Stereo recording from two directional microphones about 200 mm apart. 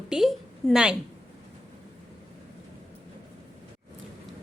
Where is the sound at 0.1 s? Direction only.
Centre (ahead or behind).